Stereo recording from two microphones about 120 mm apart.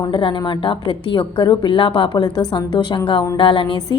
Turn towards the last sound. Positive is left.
turn(degrees=40)  # may be behind; listen again after turning